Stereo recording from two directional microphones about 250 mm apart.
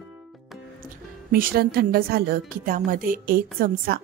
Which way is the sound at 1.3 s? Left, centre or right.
Right.